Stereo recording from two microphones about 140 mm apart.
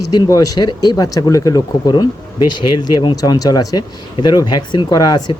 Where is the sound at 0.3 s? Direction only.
25° left (ahead or behind).